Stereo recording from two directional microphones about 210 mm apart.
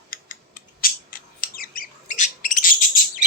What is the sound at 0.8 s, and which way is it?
Bird, 45° left (ahead or behind).